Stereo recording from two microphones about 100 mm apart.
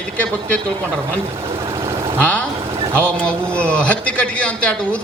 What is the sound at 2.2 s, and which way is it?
A man's voice, 10° left (ahead or behind).